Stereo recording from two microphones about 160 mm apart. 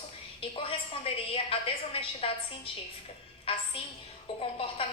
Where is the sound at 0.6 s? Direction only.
35° left (ahead or behind).